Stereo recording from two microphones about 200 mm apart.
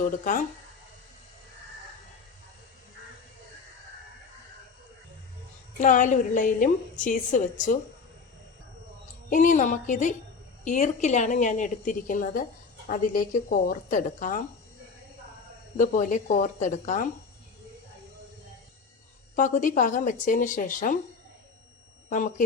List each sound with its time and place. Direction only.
5.8 s a woman's voice: 40° left (ahead or behind)
9.3 s a woman's voice: 40° left (ahead or behind)
15.8 s a woman's voice: 40° left (ahead or behind)
19.4 s a woman's voice: 40° left (ahead or behind)
22.1 s speech: 45° left (ahead or behind)